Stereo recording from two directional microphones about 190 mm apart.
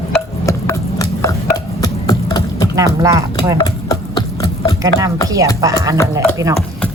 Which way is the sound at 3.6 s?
20° left (ahead or behind).